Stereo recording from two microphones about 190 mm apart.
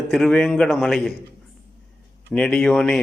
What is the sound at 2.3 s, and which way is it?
Speech, 5° left (ahead or behind).